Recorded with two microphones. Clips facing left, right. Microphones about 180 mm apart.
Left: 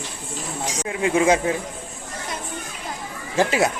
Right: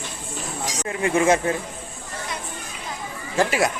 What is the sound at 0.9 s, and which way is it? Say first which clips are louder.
Speech: left 1 dB; 10° left (ahead or behind).